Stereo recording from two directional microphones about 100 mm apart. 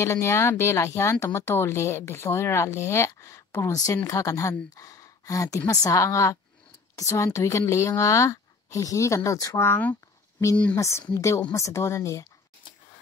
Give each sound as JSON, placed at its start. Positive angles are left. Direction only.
{"t": 0.0, "sound": "speech", "side_deg": 25}
{"t": 4.7, "sound": "a sound", "side_deg": 30}
{"t": 5.7, "sound": "speech", "side_deg": 35}
{"t": 9.6, "sound": "speech", "side_deg": 20}